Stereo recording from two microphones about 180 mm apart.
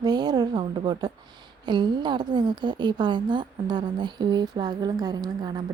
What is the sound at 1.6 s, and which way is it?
A woman's voice, 25° right (ahead or behind).